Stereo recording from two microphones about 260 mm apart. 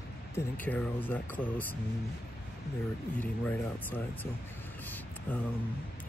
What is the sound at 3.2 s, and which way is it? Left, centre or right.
Speech, centre.